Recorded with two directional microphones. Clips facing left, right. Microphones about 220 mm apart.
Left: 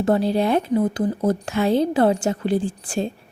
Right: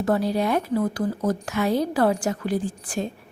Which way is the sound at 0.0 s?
25° left (ahead or behind).